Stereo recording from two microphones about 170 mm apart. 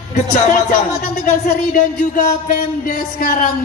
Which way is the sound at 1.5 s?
50° left (ahead or behind).